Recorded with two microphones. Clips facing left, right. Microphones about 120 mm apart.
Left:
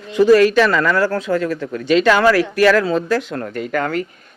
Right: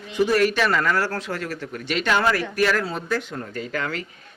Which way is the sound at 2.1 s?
90° left.